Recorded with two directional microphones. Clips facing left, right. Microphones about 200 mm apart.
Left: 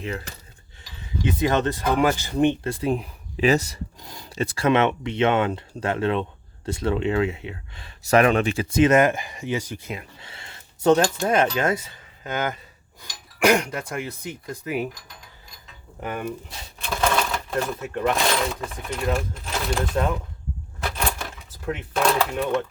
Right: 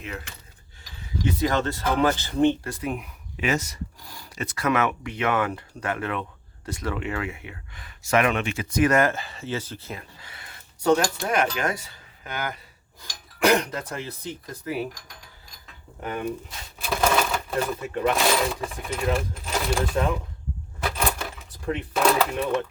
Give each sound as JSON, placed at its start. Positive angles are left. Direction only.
{"t": 1.4, "sound": "speech", "side_deg": 20}
{"t": 2.8, "sound": "speech", "side_deg": 30}
{"t": 16.0, "sound": "speech", "side_deg": 5}
{"t": 21.1, "sound": "keys jangling", "side_deg": 0}